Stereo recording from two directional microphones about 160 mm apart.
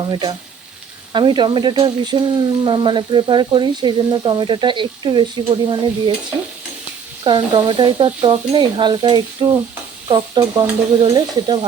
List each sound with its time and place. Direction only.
0.1 s speech: 25° right (ahead or behind)
7.3 s speech: 30° right (ahead or behind)